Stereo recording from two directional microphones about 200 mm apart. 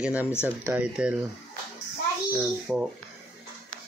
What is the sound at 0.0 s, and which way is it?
Speech, 5° right (ahead or behind).